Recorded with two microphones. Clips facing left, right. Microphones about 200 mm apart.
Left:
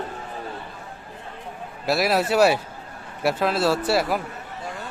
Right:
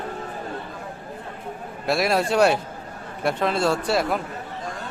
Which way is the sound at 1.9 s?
Centre (ahead or behind).